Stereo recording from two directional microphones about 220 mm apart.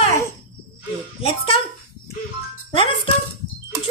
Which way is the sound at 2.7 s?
25° left (ahead or behind).